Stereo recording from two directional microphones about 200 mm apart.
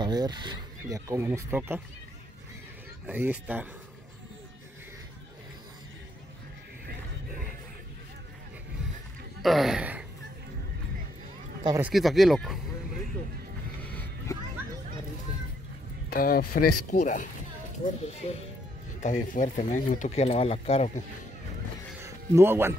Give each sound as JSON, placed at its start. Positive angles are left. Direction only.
{"t": 0.0, "sound": "speech", "side_deg": -20}
{"t": 3.1, "sound": "speech", "side_deg": -10}
{"t": 9.4, "sound": "speech", "side_deg": 0}
{"t": 11.8, "sound": "speech", "side_deg": 0}
{"t": 13.9, "sound": "a sound", "side_deg": 15}
{"t": 16.1, "sound": "speech", "side_deg": 45}
{"t": 22.0, "sound": "music", "side_deg": -15}